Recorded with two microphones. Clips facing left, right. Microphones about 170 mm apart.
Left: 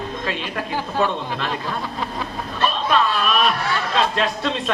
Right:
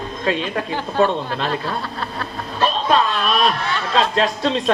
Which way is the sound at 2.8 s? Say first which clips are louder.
Right 1 dB; 35° right (ahead or behind).